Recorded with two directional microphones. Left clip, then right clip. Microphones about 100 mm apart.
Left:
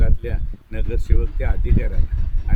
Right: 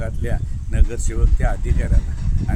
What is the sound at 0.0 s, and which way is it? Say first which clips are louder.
Speech: right 2 dB; 35° right (ahead or behind).